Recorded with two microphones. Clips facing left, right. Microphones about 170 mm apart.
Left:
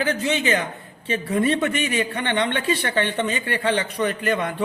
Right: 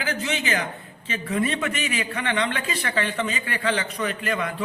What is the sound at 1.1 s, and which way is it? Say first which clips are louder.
Speech: left 4 dB; 35° left (ahead or behind).